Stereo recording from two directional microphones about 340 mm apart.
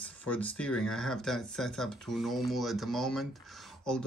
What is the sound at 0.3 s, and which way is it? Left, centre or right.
Speech, centre.